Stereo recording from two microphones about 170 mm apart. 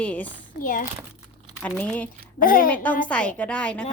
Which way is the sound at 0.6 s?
50° left (ahead or behind).